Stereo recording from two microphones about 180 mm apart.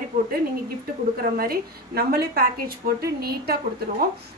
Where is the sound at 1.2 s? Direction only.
55° right (ahead or behind).